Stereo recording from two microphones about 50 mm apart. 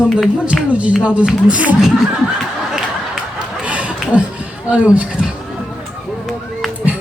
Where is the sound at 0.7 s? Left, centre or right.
Right.